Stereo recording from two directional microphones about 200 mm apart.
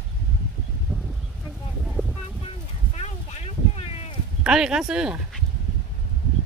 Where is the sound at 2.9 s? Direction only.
30° left (ahead or behind).